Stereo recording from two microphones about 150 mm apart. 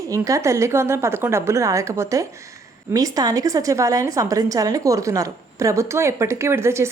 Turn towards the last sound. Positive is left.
turn(degrees=-15)  # may be behind; listen again after turning